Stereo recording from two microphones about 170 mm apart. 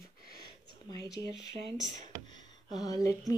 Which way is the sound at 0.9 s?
20° left (ahead or behind).